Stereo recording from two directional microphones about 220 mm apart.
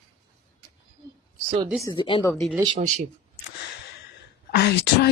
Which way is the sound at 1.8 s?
20° left (ahead or behind).